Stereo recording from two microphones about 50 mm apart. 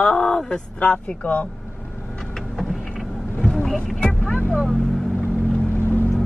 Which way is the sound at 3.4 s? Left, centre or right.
Centre.